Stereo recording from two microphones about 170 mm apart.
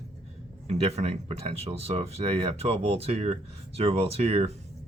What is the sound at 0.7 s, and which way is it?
Speech, 40° right (ahead or behind).